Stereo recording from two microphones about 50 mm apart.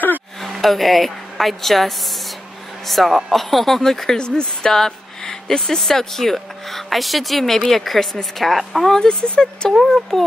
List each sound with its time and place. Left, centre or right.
0.4 s speech: centre
9.3 s speech: left
9.7 s speech: centre